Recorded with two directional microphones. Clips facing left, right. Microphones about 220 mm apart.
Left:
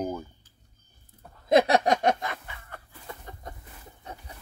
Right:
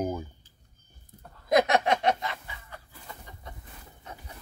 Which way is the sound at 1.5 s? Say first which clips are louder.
Left 2 dB; 35° left (ahead or behind).